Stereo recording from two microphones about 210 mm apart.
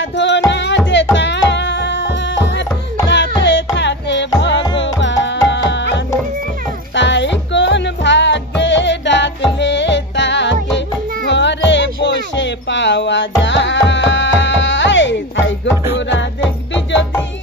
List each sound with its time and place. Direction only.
0.1 s music: 60° left (ahead or behind)
7.0 s music: 60° left (ahead or behind)